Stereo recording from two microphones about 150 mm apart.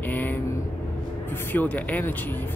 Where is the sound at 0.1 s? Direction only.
10° left (ahead or behind).